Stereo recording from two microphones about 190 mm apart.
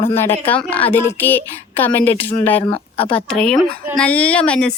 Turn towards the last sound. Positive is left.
turn(degrees=5)  # may be behind; listen again after turning